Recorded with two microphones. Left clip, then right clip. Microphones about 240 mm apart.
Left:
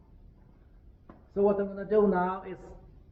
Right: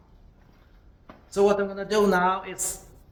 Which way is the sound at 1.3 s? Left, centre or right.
Right.